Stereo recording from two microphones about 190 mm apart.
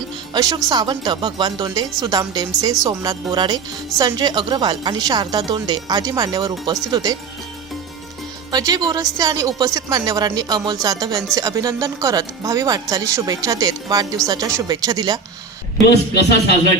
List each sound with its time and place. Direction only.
0.3 s a woman's voice: 20° right (ahead or behind)
8.5 s a woman's voice: 20° right (ahead or behind)